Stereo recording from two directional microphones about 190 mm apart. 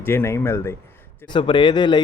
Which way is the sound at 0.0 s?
10° left (ahead or behind).